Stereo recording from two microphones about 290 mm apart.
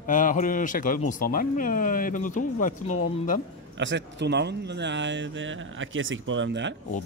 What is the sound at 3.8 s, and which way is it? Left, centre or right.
Speech, right.